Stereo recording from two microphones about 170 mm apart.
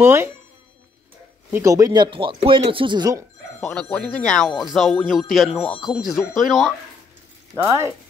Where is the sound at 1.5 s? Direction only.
20° right (ahead or behind).